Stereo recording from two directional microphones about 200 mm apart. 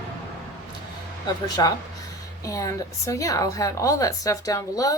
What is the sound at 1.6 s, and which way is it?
A woman's voice, 20° left (ahead or behind).